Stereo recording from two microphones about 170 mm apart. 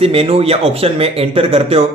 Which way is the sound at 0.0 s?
35° right (ahead or behind).